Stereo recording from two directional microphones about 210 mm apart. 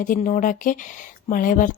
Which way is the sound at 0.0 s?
40° left (ahead or behind).